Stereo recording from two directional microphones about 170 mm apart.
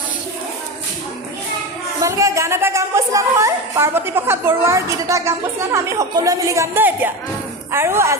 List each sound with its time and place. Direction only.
2.0 s speech: 20° right (ahead or behind)